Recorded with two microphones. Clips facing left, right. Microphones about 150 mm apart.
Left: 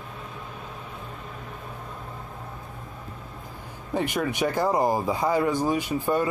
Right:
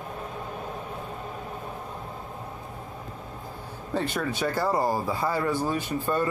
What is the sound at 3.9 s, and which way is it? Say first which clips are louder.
Speech: left 2 dB; 15° left (ahead or behind).